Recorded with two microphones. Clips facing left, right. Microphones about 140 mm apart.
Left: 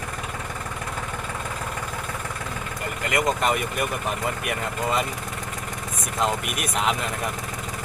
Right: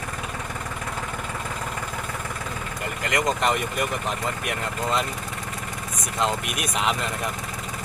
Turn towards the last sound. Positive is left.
turn(degrees=0)  # may be behind; listen again after turning